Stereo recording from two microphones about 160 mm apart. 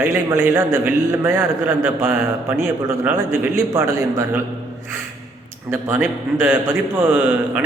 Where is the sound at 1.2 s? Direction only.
15° right (ahead or behind).